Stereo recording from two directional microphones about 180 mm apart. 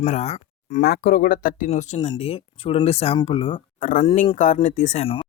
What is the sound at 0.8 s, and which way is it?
Speech, 55° left (ahead or behind).